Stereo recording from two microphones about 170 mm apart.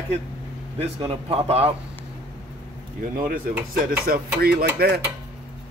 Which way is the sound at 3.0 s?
50° right (ahead or behind).